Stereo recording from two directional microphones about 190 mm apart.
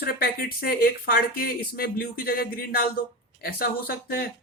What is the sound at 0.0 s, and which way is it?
Speech, 50° left (ahead or behind).